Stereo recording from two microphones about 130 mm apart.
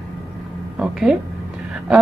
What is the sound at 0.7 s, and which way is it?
Speech, 5° right (ahead or behind).